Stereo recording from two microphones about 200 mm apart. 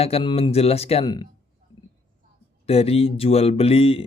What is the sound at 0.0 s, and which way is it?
Speech, 30° left (ahead or behind).